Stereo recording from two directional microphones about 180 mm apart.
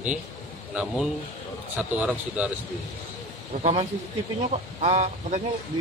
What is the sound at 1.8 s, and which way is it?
Speech, 10° right (ahead or behind).